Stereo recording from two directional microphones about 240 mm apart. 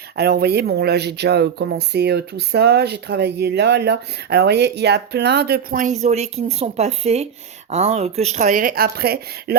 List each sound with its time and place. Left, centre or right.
0.2 s speech: right